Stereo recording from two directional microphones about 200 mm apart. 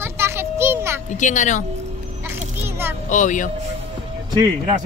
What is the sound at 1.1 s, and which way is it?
Speech, 40° left (ahead or behind).